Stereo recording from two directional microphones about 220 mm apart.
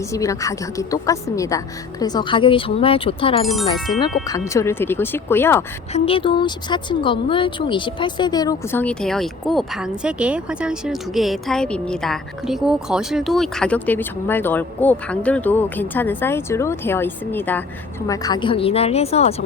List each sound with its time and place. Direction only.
0.1 s a woman's voice: 15° left (ahead or behind)
3.4 s speech: centre (ahead or behind)
4.3 s speech: 15° left (ahead or behind)
5.9 s a woman's voice: 25° left (ahead or behind)